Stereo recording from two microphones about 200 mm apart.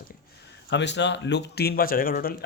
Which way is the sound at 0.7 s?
60° left (ahead or behind).